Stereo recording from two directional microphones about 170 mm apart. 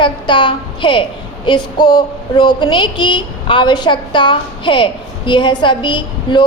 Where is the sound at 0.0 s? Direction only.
30° left (ahead or behind).